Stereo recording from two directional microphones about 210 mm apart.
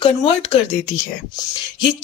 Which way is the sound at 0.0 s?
25° left (ahead or behind).